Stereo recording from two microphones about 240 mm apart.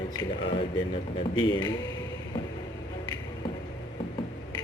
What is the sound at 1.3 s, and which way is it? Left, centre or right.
Speech, centre.